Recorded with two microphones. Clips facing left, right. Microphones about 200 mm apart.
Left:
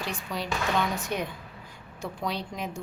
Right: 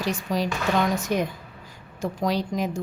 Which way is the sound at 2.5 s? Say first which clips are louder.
Right 8 dB; 40° right (ahead or behind).